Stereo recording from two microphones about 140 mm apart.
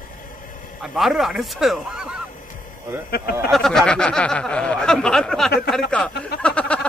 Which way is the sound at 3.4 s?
Centre (ahead or behind).